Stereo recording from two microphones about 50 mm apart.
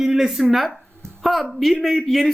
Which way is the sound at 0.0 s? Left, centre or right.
Centre.